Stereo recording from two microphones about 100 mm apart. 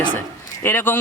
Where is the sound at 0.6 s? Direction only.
20° left (ahead or behind).